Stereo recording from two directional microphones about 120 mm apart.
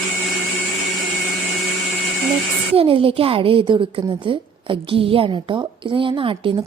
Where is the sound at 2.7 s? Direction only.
50° right (ahead or behind).